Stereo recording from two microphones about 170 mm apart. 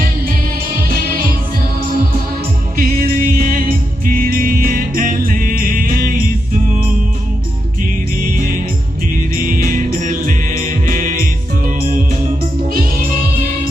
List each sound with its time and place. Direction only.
0.8 s music: 60° right (ahead or behind)
2.7 s music: 60° right (ahead or behind)
8.4 s music: 55° right (ahead or behind)
12.6 s music: 55° right (ahead or behind)